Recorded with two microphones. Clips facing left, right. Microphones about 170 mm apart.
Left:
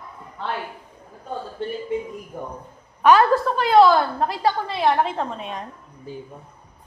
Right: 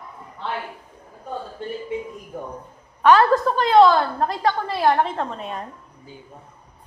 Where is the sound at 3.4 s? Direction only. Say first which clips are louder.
Right 1 dB; 5° left (ahead or behind).